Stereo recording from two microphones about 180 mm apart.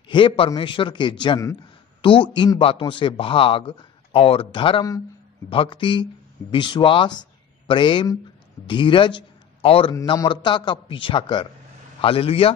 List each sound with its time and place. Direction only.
0.1 s a man's voice: 25° left (ahead or behind)